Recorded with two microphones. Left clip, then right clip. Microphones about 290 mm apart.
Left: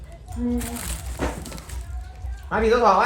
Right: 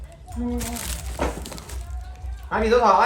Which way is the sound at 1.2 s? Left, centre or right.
Right.